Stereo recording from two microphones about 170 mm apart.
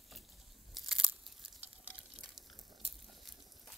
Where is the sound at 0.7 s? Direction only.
5° right (ahead or behind).